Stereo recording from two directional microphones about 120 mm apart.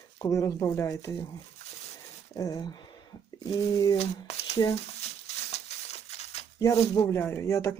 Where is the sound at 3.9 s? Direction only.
65° left (ahead or behind).